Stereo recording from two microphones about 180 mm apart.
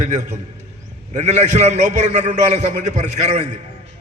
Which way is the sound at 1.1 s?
40° right (ahead or behind).